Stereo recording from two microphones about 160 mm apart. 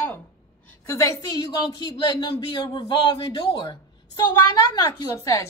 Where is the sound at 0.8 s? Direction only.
20° left (ahead or behind).